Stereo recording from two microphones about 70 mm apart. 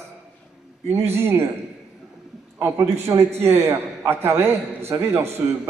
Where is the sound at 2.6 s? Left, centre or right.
Right.